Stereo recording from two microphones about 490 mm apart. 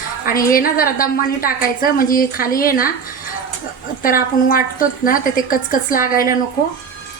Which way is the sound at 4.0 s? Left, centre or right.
Centre.